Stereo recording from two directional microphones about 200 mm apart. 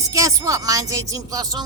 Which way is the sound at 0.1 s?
15° right (ahead or behind).